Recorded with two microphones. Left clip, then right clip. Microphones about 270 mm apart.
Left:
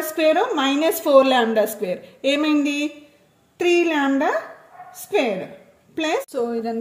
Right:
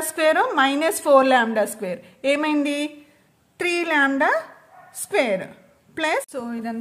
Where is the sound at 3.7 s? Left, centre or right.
Right.